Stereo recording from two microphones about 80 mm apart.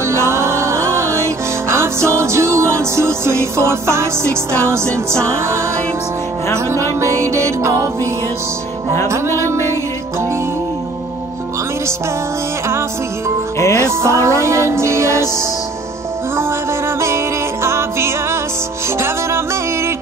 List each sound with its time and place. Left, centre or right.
0.1 s music: right
7.0 s music: right
9.0 s music: right
13.6 s music: left
13.8 s music: right
17.6 s music: right